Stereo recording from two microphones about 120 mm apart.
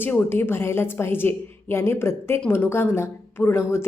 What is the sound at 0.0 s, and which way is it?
A woman's voice, 15° left (ahead or behind).